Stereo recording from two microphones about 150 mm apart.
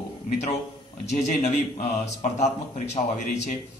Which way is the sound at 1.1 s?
50° left (ahead or behind).